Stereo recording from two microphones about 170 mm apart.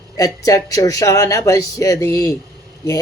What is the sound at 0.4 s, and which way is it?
Speech, 20° left (ahead or behind).